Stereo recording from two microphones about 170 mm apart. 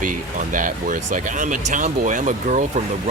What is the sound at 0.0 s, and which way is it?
Speech, 50° right (ahead or behind).